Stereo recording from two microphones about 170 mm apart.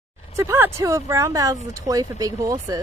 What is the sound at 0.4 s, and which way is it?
Speech, 15° right (ahead or behind).